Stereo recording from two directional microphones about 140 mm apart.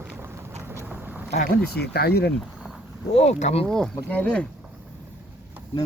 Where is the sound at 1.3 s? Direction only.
60° left (ahead or behind).